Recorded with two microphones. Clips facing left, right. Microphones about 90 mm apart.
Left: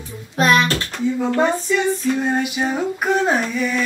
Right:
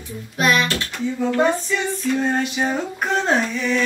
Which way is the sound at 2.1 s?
10° left (ahead or behind).